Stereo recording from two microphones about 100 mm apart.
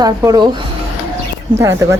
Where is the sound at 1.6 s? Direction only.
30° right (ahead or behind).